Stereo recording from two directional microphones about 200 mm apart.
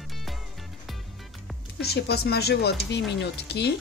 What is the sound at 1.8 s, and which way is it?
Speech, 55° left (ahead or behind).